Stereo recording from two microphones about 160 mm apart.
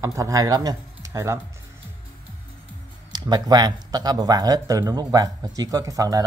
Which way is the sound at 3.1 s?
25° right (ahead or behind).